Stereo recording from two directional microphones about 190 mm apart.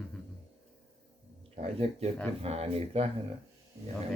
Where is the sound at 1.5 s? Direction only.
35° right (ahead or behind).